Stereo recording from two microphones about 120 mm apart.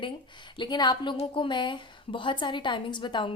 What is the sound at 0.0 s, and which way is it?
A woman's voice, 40° left (ahead or behind).